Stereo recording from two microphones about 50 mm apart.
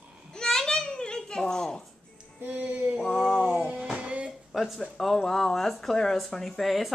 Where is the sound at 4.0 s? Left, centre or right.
Right.